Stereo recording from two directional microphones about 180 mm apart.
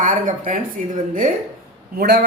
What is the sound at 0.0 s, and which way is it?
Speech, 45° right (ahead or behind).